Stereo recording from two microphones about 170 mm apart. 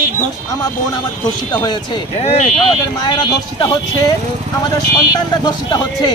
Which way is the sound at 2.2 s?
40° left (ahead or behind).